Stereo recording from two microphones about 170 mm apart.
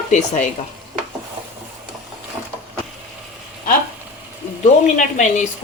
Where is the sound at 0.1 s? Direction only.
45° left (ahead or behind).